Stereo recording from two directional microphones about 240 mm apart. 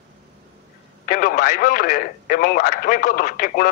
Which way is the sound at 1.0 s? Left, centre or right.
Left.